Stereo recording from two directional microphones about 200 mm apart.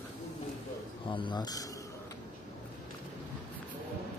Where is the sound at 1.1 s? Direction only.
20° left (ahead or behind).